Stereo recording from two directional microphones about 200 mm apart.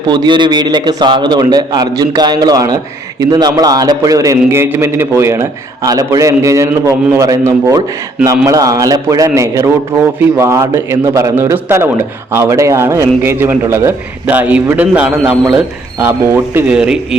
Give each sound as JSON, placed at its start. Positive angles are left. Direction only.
{"t": 0.1, "sound": "a man's voice", "side_deg": -25}